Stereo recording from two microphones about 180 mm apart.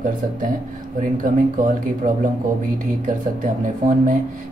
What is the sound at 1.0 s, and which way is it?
Speech, 45° right (ahead or behind).